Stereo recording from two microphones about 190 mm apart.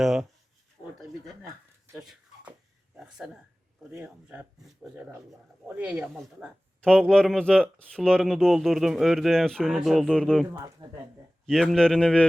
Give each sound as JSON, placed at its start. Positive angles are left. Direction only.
{"t": 0.0, "sound": "speech", "side_deg": 0}
{"t": 1.9, "sound": "a sound", "side_deg": -5}
{"t": 3.8, "sound": "speech", "side_deg": -10}
{"t": 10.5, "sound": "speech", "side_deg": -15}
{"t": 11.4, "sound": "speech", "side_deg": 0}